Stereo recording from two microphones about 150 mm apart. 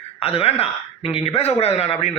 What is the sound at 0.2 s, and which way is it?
A man's voice, 40° left (ahead or behind).